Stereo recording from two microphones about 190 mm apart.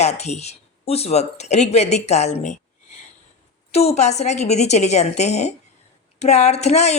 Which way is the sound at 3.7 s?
35° left (ahead or behind).